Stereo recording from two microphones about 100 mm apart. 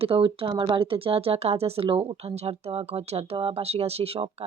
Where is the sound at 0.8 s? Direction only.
65° right (ahead or behind).